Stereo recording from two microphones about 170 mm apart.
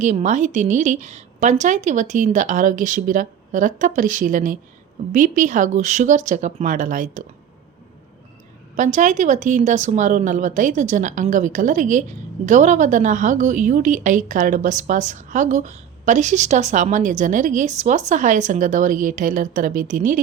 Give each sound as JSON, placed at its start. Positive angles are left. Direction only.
{"t": 0.0, "sound": "a woman's voice", "side_deg": -45}
{"t": 8.7, "sound": "a woman's voice", "side_deg": -50}